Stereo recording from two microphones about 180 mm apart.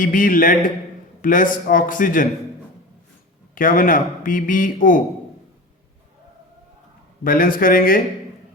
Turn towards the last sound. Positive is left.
turn(degrees=50)  # may be behind; listen again after turning